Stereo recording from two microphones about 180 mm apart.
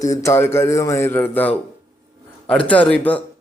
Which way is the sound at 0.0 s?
15° left (ahead or behind).